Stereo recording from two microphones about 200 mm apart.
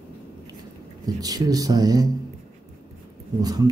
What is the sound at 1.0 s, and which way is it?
Speech, 20° right (ahead or behind).